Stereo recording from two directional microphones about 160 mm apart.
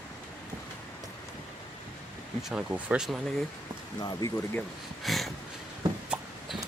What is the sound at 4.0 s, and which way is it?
Speech, 25° left (ahead or behind).